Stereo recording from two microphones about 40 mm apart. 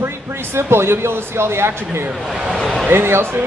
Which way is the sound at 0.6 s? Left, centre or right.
Right.